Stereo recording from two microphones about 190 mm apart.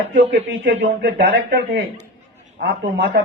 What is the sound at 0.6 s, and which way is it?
Speech, 50° right (ahead or behind).